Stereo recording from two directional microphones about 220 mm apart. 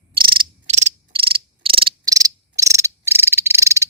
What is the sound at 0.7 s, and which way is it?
Insect, 30° right (ahead or behind).